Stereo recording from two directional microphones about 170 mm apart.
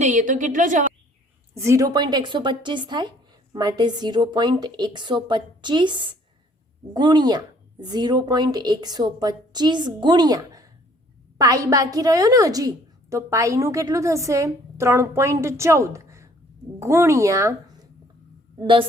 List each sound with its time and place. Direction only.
0.0 s a woman's voice: 45° right (ahead or behind)
1.5 s a woman's voice: 15° right (ahead or behind)
18.6 s a woman's voice: 30° right (ahead or behind)